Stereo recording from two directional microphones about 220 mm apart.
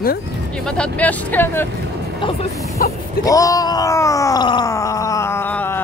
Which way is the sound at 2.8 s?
40° left (ahead or behind).